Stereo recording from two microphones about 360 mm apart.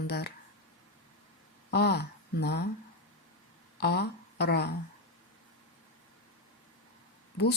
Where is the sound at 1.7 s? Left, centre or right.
Left.